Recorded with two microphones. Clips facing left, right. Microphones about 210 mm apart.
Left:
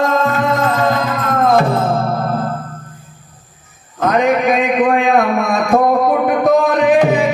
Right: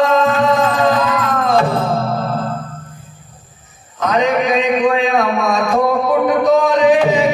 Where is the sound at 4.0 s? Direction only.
55° left (ahead or behind).